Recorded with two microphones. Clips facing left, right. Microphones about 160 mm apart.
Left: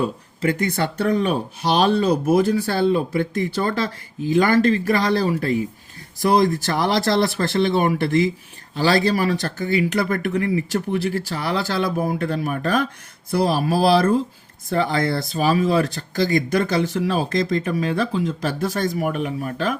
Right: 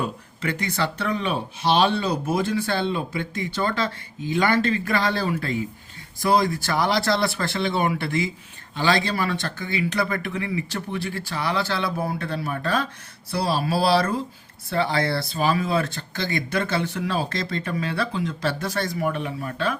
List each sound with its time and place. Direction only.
0.0 s speech: 45° left (ahead or behind)